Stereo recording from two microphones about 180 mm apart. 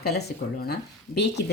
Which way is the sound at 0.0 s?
60° left (ahead or behind).